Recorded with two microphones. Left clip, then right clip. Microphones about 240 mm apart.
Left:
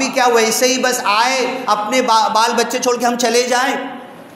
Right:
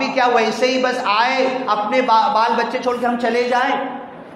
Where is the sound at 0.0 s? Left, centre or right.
Left.